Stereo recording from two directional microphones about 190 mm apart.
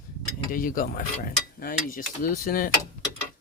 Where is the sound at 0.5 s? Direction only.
45° left (ahead or behind).